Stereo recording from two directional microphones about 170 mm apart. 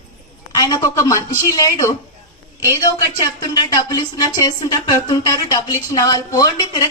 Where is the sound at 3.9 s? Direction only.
25° left (ahead or behind).